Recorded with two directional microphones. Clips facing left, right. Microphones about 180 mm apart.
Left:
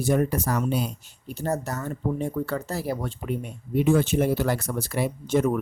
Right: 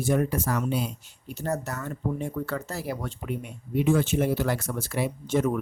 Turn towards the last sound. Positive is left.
turn(degrees=40)  # may be behind; listen again after turning